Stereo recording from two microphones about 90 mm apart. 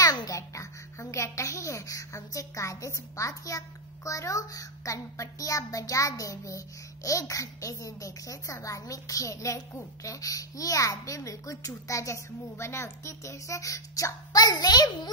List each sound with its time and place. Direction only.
0.0 s a child's voice: 45° left (ahead or behind)